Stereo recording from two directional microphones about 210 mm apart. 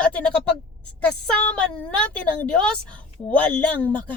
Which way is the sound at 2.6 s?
5° left (ahead or behind).